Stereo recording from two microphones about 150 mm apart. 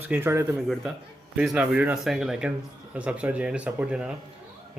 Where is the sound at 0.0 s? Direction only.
15° right (ahead or behind).